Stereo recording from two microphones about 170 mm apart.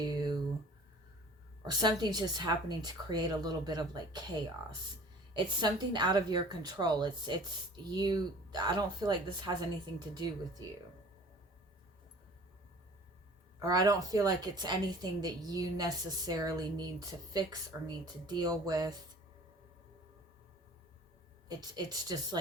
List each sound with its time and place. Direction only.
0.0 s a sound: 25° right (ahead or behind)
1.6 s a woman's voice: 25° right (ahead or behind)
5.3 s a woman's voice: 25° right (ahead or behind)
13.6 s a woman's voice: 20° right (ahead or behind)
21.4 s a woman's voice: 25° right (ahead or behind)